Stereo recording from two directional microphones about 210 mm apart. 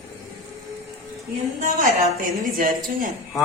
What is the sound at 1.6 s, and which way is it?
A woman's voice, 40° right (ahead or behind).